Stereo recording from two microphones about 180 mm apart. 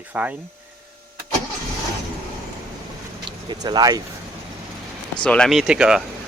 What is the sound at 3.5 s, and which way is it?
Speech, 25° right (ahead or behind).